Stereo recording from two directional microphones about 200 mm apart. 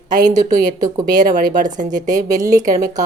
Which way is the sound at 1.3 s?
40° right (ahead or behind).